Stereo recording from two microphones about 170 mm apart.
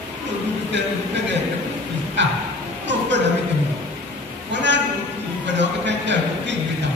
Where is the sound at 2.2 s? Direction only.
90° right.